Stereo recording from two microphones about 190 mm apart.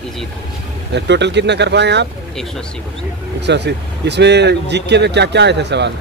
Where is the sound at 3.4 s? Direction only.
65° right (ahead or behind).